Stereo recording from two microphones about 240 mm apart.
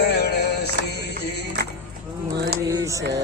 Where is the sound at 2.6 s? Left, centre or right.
Centre.